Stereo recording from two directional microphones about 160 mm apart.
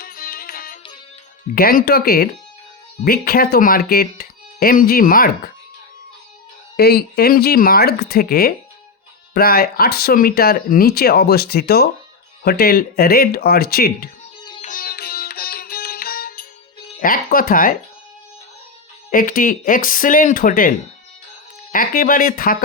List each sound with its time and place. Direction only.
0.0 s music: 65° left (ahead or behind)
1.5 s speech: 70° left (ahead or behind)
6.7 s speech: 85° left
12.4 s speech: 70° left (ahead or behind)
14.6 s music: 60° left (ahead or behind)
17.0 s speech: 60° left (ahead or behind)
19.1 s speech: 60° left (ahead or behind)